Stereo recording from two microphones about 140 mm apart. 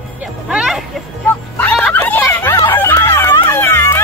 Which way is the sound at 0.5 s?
5° right (ahead or behind).